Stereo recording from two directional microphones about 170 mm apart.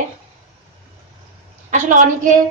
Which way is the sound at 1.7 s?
45° right (ahead or behind).